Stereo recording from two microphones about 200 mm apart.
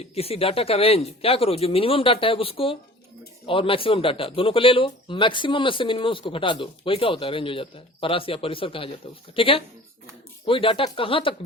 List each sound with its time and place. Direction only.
0.0 s a man's voice: 30° left (ahead or behind)